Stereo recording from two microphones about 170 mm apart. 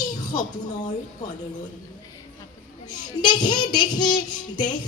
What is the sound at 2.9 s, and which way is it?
Speech, 25° left (ahead or behind).